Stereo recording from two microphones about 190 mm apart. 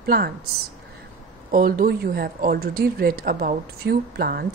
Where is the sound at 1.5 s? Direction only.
50° right (ahead or behind).